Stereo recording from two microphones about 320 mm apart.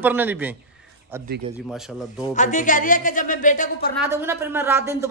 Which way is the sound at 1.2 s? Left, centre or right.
Right.